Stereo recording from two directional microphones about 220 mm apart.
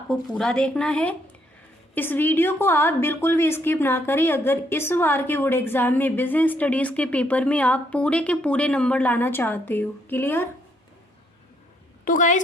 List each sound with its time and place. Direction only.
0.1 s a woman's voice: centre (ahead or behind)
12.0 s a woman's voice: 35° left (ahead or behind)